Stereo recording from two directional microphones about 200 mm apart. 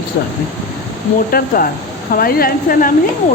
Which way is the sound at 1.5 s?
45° left (ahead or behind).